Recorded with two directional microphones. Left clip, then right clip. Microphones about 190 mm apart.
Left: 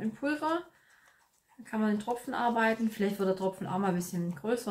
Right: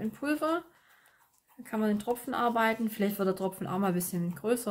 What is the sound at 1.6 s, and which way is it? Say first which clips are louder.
Speech: right 1 dB; 65° right (ahead or behind).